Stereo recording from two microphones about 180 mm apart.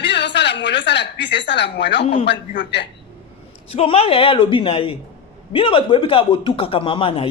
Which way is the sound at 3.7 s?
35° left (ahead or behind).